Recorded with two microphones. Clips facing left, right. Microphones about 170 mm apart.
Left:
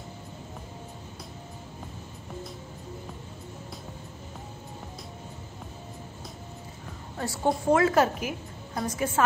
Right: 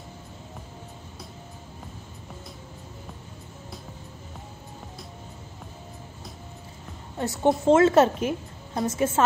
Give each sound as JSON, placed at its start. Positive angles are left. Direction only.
{"t": 7.2, "sound": "a woman's voice", "side_deg": -20}